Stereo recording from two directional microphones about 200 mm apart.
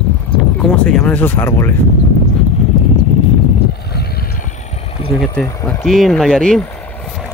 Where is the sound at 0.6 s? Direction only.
5° left (ahead or behind).